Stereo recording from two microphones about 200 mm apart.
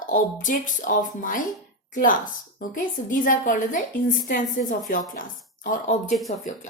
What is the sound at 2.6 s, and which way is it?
A woman's voice, 40° left (ahead or behind).